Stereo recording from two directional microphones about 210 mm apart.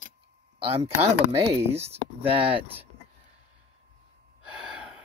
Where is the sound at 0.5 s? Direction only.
25° right (ahead or behind).